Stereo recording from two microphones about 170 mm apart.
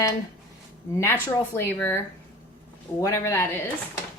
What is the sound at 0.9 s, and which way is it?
Speech, 15° left (ahead or behind).